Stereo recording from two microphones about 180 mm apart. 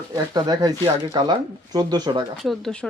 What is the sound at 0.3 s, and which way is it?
Speech, 20° right (ahead or behind).